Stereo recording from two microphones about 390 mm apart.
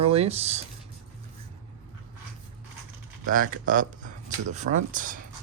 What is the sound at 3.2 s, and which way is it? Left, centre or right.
Speech, right.